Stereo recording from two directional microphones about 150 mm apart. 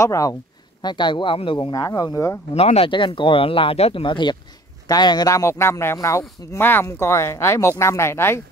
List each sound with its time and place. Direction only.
0.0 s speech: 20° left (ahead or behind)
1.8 s speech: 25° left (ahead or behind)
2.5 s a man's voice: 40° left (ahead or behind); by 8.4 s 15° left (ahead or behind)